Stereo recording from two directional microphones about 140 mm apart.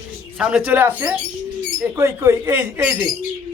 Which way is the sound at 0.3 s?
5° right (ahead or behind).